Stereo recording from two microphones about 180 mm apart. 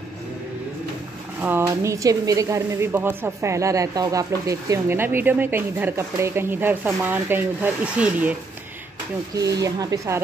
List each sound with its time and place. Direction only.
1.4 s a woman's voice: 15° right (ahead or behind)
9.4 s speech: 20° right (ahead or behind)